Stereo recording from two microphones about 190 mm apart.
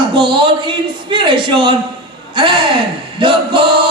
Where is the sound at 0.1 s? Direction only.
25° right (ahead or behind).